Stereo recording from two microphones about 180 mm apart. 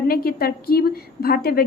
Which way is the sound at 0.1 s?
55° left (ahead or behind).